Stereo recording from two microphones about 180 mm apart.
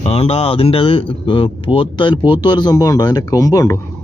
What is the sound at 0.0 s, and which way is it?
Speech, 35° left (ahead or behind).